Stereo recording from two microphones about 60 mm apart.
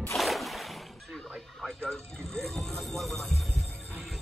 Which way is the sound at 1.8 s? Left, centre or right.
Centre.